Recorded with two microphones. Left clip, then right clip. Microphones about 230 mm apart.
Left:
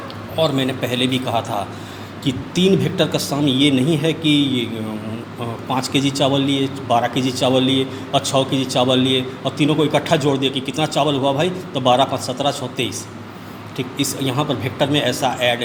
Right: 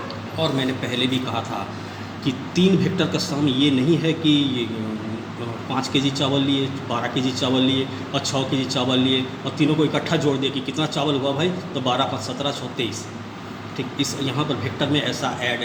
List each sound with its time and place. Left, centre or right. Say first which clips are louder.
0.4 s a man's voice: left 3 dB; left
5.8 s a man's voice: left 3 dB; left